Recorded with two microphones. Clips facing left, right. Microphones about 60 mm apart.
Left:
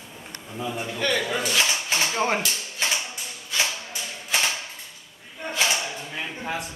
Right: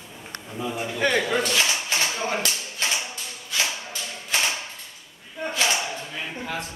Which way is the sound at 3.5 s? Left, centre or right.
Centre.